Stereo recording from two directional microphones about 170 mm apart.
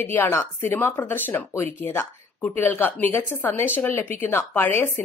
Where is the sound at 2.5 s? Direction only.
10° left (ahead or behind).